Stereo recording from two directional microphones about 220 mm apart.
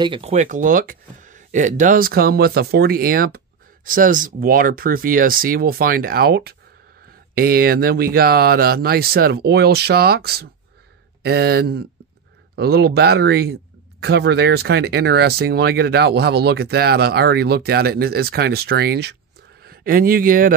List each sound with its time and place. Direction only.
0.0 s speech: 25° right (ahead or behind)